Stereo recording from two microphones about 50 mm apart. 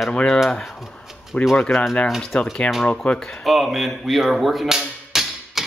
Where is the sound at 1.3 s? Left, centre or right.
Left.